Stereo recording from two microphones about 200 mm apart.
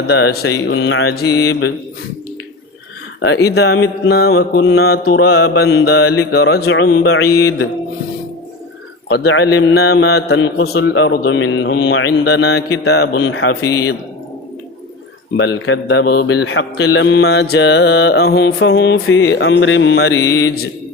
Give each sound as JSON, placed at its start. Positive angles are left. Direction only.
{"t": 0.1, "sound": "speech", "side_deg": 55}
{"t": 3.2, "sound": "mantra", "side_deg": 55}
{"t": 9.1, "sound": "speech", "side_deg": 60}
{"t": 15.4, "sound": "speech", "side_deg": 65}
{"t": 20.1, "sound": "mantra", "side_deg": 15}